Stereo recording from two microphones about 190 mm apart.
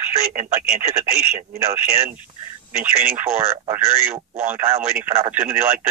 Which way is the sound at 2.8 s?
10° right (ahead or behind).